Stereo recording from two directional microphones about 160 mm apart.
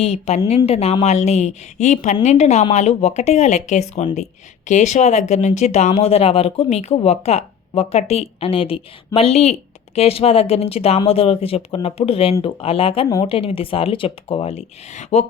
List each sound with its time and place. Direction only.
0.0 s a woman's voice: 40° left (ahead or behind)